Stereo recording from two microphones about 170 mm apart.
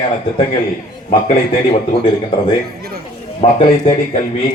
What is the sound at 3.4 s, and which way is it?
Speech, 35° left (ahead or behind).